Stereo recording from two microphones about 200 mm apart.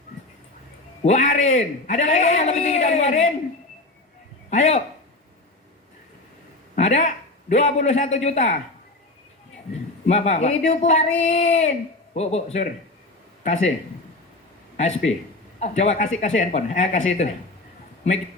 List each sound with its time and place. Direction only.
1.0 s a man's voice: 35° left (ahead or behind)
4.4 s a man's voice: 35° left (ahead or behind)
6.7 s a man's voice: 35° left (ahead or behind)
10.1 s a man's voice: 35° left (ahead or behind)
14.8 s a man's voice: 35° left (ahead or behind)